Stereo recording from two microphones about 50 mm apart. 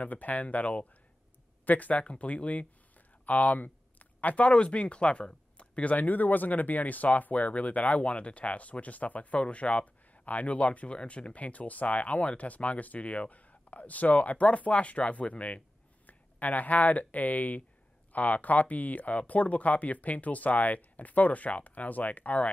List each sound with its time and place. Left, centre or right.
0.0 s speech: left